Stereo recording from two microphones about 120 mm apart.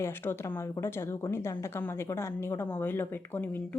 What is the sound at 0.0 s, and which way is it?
A woman's voice, 20° left (ahead or behind).